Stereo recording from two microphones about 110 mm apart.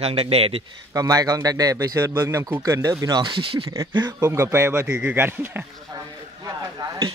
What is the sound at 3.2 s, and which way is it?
Speech, 50° right (ahead or behind).